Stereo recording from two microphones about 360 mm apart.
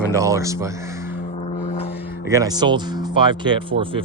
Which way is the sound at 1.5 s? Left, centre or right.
Centre.